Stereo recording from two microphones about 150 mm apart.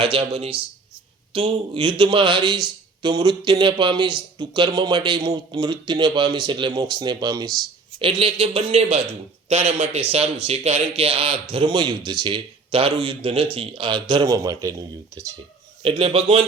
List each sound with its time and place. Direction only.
0.0 s a man's voice: 35° right (ahead or behind)
7.9 s a man's voice: 35° right (ahead or behind); by 15.3 s 20° right (ahead or behind)
15.8 s a man's voice: 35° right (ahead or behind)